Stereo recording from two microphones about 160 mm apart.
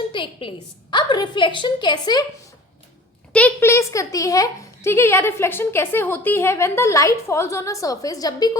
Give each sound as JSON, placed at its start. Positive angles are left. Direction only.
{"t": 0.1, "sound": "a woman's voice", "side_deg": 30}
{"t": 3.3, "sound": "speech", "side_deg": 10}